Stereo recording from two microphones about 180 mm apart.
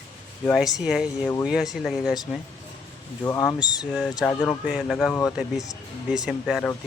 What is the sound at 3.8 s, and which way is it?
Speech, centre (ahead or behind).